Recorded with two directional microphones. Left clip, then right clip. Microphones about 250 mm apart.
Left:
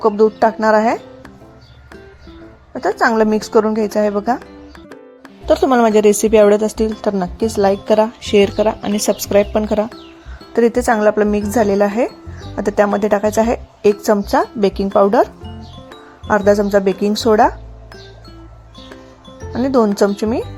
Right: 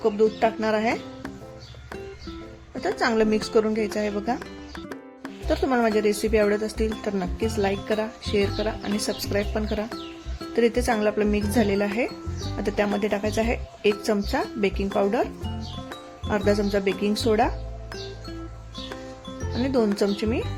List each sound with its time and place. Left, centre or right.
0.4 s speech: centre
3.0 s speech: centre
5.5 s speech: left
16.3 s speech: centre
19.5 s speech: centre